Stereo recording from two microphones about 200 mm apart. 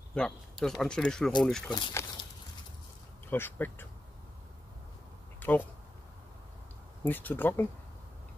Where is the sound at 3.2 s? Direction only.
10° left (ahead or behind).